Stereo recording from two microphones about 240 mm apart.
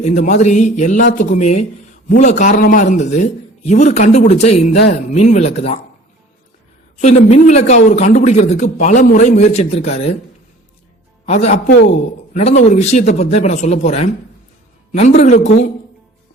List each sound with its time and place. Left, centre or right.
0.0 s a man's voice: left
7.0 s speech: left
11.3 s speech: left